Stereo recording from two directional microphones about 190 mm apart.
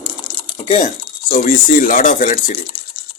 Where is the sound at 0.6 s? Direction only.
30° left (ahead or behind).